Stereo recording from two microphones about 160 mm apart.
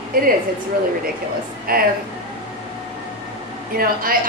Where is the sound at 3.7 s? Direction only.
65° right (ahead or behind).